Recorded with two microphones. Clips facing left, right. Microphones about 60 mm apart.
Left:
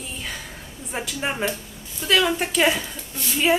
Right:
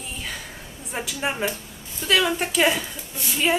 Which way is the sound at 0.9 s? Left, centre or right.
Centre.